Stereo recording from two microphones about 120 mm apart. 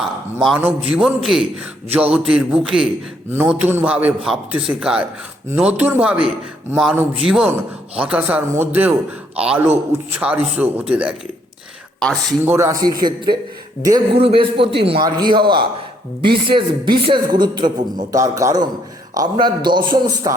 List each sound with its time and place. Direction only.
0.3 s a man's voice: 5° right (ahead or behind)
11.9 s speech: 5° left (ahead or behind)
12.5 s a man's voice: 20° right (ahead or behind)
14.2 s a man's voice: 50° right (ahead or behind)
18.1 s a man's voice: 25° right (ahead or behind)